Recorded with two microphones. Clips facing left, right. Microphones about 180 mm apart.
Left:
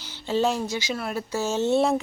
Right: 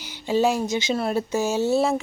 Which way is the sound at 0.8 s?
25° right (ahead or behind).